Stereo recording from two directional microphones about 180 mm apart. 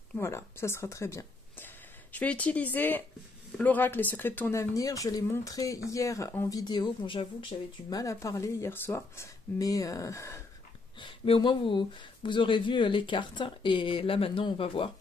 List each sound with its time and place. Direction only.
0.1 s speech: 15° left (ahead or behind)
11.0 s speech: 30° left (ahead or behind)